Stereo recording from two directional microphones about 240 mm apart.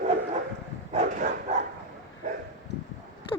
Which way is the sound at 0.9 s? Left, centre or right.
Right.